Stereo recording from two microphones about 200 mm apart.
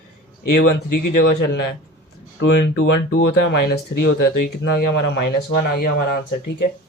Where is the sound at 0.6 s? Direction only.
60° left (ahead or behind).